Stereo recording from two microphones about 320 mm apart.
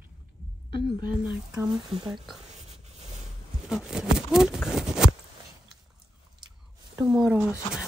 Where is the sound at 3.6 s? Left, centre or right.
Centre.